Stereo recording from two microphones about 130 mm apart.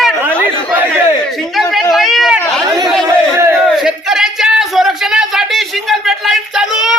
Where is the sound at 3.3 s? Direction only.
20° right (ahead or behind).